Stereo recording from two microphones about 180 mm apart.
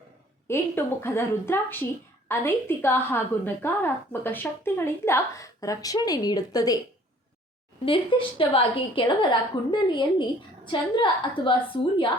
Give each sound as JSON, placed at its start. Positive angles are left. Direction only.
{"t": 0.4, "sound": "a woman's voice", "side_deg": 15}
{"t": 7.9, "sound": "a woman's voice", "side_deg": 30}